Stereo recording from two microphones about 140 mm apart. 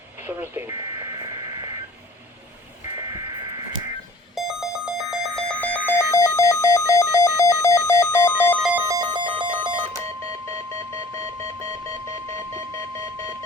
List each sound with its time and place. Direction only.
0.2 s speech: 15° right (ahead or behind)
0.7 s radio: 30° right (ahead or behind)
4.4 s alarm clock: 5° right (ahead or behind)
5.5 s alarm clock: 10° left (ahead or behind)
9.0 s alarm clock: 35° right (ahead or behind)